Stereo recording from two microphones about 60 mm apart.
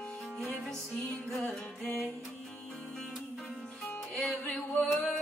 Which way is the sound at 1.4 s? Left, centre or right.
Left.